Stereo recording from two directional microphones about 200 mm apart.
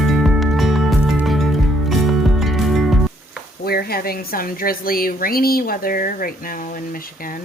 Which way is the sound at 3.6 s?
50° left (ahead or behind).